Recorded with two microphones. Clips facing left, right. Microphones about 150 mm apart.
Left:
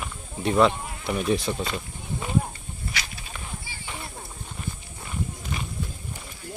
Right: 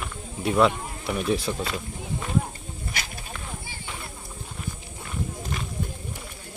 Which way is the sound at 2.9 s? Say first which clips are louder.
Even; 50° right (ahead or behind).